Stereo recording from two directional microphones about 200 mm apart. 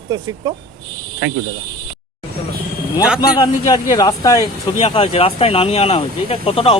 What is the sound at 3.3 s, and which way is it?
Speech, 20° left (ahead or behind).